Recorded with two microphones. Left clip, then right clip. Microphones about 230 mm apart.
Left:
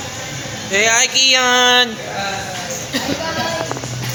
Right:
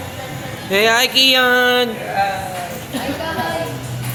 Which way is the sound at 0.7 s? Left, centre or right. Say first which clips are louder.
Even; right.